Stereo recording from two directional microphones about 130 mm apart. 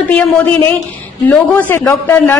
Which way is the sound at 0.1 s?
10° left (ahead or behind).